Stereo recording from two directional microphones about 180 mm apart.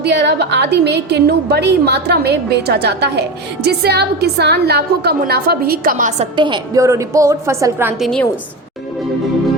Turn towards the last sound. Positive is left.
turn(degrees=-15)  # may be behind; listen again after turning